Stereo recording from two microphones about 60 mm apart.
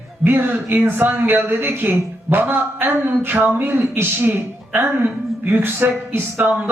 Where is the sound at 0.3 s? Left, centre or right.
Right.